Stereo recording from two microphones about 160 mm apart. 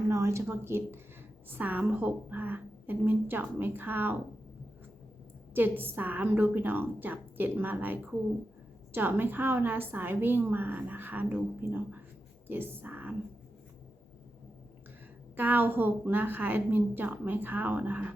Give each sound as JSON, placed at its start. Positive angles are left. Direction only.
{"t": 0.1, "sound": "a woman's voice", "side_deg": -15}
{"t": 5.5, "sound": "a woman's voice", "side_deg": -10}
{"t": 15.4, "sound": "a woman's voice", "side_deg": -10}